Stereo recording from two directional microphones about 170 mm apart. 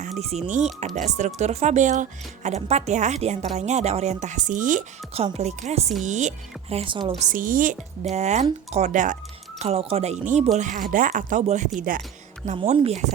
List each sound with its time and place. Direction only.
0.0 s speech: 40° right (ahead or behind)
5.1 s a woman's voice: 40° right (ahead or behind)
7.2 s speech: 50° right (ahead or behind)
9.6 s a woman's voice: 35° right (ahead or behind); by 12.0 s 55° right (ahead or behind)
12.5 s speech: 40° right (ahead or behind)